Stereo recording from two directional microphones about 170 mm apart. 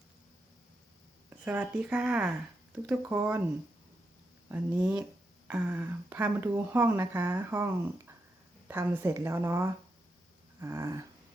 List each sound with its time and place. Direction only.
1.3 s speech: 10° right (ahead or behind)
4.4 s speech: 10° right (ahead or behind)